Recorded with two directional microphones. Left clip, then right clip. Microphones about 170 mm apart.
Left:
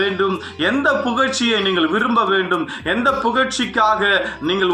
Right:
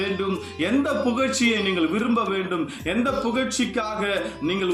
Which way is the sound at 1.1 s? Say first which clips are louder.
Left 5 dB; 15° right (ahead or behind).